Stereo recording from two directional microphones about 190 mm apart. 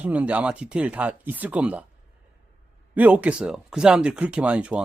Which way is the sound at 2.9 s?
10° right (ahead or behind).